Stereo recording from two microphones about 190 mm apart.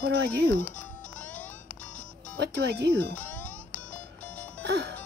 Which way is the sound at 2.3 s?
60° right (ahead or behind).